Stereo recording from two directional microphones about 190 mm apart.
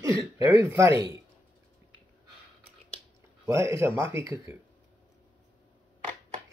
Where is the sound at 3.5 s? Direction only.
15° right (ahead or behind).